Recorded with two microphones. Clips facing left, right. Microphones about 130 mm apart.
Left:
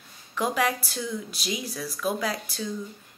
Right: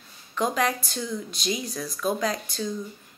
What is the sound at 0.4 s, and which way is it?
Speech, 10° left (ahead or behind).